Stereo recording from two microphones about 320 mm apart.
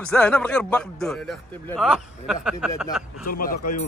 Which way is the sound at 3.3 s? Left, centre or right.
Left.